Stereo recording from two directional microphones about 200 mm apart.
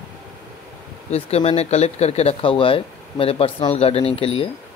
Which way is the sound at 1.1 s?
30° left (ahead or behind).